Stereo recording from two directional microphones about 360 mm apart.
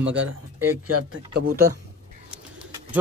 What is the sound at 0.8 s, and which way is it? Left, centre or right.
Speech, right.